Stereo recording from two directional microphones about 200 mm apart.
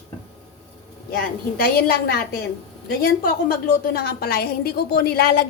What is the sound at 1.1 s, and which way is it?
A woman's voice, 50° left (ahead or behind).